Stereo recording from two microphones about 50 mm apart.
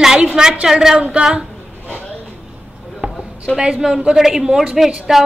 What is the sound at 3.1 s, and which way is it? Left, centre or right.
A woman's voice, centre.